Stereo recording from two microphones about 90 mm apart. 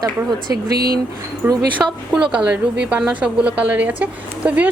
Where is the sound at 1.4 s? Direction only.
25° right (ahead or behind).